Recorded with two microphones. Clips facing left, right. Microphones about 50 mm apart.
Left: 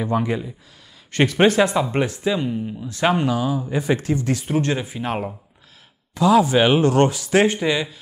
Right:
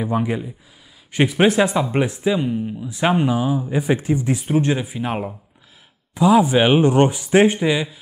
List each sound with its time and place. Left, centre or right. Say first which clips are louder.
0.0 s speech: even; centre
2.9 s speech: right 1 dB; centre